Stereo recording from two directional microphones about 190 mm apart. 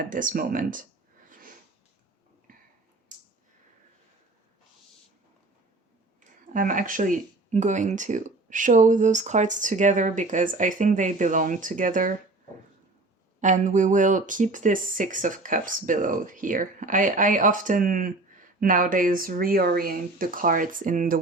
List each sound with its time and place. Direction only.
0.0 s speech: 45° right (ahead or behind)
1.3 s sniff: 45° right (ahead or behind)
2.5 s a sound: 45° right (ahead or behind)
6.5 s speech: 45° right (ahead or behind)
13.4 s speech: 40° right (ahead or behind)